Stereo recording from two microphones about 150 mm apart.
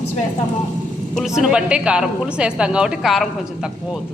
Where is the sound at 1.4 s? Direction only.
5° right (ahead or behind).